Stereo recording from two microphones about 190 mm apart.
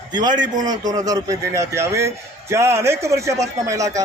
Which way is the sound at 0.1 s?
20° right (ahead or behind).